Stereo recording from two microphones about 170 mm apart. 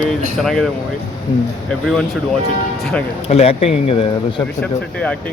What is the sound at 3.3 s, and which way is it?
Speech, 35° left (ahead or behind).